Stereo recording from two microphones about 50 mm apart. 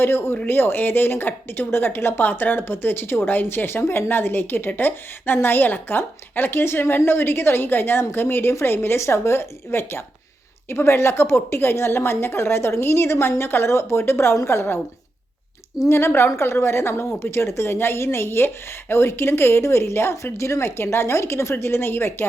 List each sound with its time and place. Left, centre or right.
0.0 s a woman's voice: left
15.8 s a woman's voice: left
21.6 s a woman's voice: left